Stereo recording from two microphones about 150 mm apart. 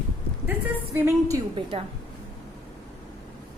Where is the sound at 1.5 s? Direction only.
35° right (ahead or behind).